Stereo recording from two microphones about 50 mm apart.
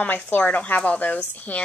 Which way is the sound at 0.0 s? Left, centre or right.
Left.